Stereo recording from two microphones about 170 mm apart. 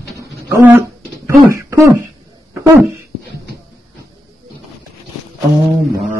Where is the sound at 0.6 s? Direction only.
10° right (ahead or behind).